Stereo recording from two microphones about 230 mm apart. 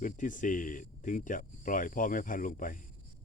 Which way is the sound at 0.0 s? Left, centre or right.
Left.